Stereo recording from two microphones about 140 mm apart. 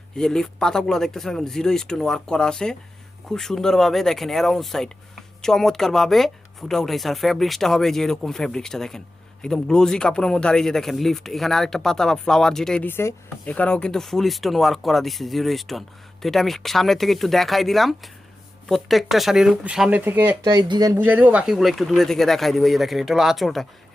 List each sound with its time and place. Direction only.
0.2 s a man's voice: 5° left (ahead or behind); by 20.3 s 15° right (ahead or behind)
20.4 s speech: 30° right (ahead or behind)
20.9 s a man's voice: 15° right (ahead or behind)